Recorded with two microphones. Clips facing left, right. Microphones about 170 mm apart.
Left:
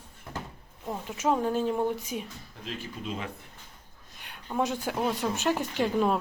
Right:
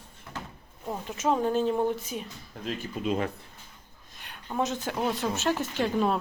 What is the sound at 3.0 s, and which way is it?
Speech, 65° right (ahead or behind).